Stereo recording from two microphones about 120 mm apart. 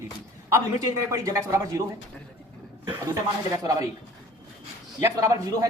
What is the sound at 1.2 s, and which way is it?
Speech, 25° right (ahead or behind).